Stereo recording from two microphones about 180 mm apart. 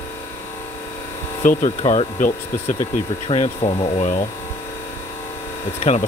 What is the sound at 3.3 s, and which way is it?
Speech, 30° left (ahead or behind).